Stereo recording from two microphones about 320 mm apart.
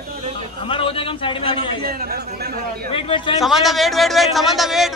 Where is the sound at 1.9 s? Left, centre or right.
Right.